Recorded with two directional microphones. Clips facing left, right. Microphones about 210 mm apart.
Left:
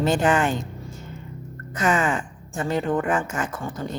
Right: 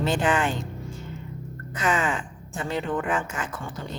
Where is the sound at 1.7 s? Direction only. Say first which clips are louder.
Left 3 dB; 45° left (ahead or behind).